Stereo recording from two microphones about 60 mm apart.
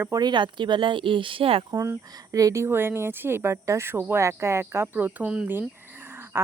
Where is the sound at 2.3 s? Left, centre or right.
Right.